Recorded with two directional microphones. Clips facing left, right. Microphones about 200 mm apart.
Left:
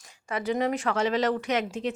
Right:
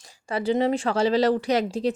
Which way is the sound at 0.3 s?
30° right (ahead or behind).